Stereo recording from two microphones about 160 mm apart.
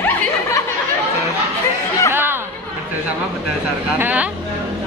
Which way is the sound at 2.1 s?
15° right (ahead or behind).